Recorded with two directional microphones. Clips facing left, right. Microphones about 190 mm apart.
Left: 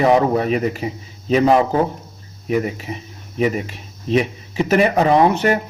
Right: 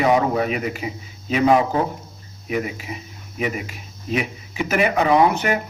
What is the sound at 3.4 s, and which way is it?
A man's voice, 35° left (ahead or behind).